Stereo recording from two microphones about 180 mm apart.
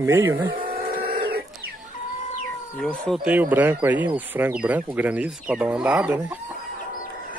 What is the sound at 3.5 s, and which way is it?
Speech, 10° right (ahead or behind).